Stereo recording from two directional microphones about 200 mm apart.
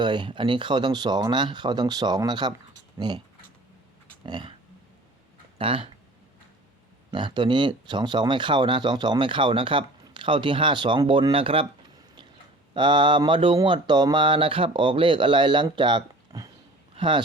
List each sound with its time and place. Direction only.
0.0 s speech: 25° right (ahead or behind)
4.3 s speech: 20° right (ahead or behind)
5.5 s speech: 25° right (ahead or behind)
7.1 s speech: 25° right (ahead or behind)
12.7 s speech: 25° right (ahead or behind)